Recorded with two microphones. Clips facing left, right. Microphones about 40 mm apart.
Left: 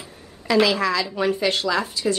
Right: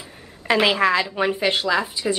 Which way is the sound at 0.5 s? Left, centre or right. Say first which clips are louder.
Right 1 dB; right.